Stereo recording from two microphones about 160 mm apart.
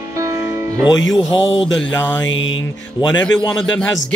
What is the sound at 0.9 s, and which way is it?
Music, 30° left (ahead or behind).